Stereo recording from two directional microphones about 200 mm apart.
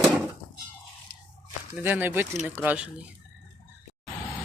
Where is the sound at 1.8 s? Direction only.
10° right (ahead or behind).